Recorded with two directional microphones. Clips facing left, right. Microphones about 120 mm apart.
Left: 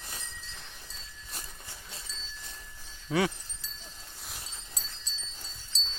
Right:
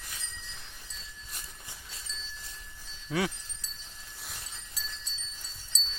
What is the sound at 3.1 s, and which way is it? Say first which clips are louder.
Speech: left 3 dB; centre (ahead or behind).